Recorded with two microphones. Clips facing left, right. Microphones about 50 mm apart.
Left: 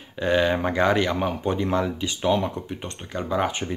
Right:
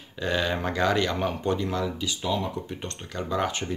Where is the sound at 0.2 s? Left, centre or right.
Left.